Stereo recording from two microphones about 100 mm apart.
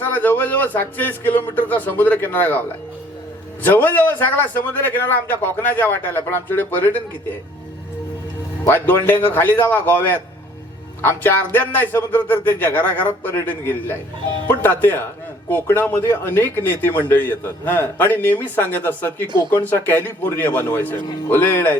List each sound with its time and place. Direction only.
0.0 s speech: 20° left (ahead or behind)
8.6 s speech: 20° left (ahead or behind)